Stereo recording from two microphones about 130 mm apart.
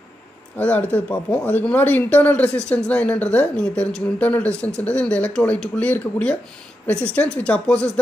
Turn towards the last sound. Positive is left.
turn(degrees=10)  # may be behind; listen again after turning